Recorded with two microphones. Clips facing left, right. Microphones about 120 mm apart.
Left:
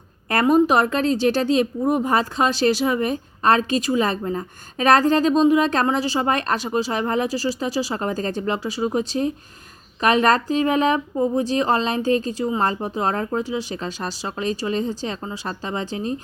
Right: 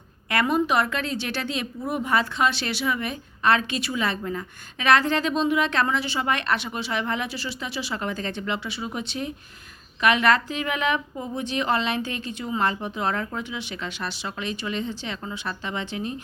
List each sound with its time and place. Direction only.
0.3 s a woman's voice: 40° left (ahead or behind)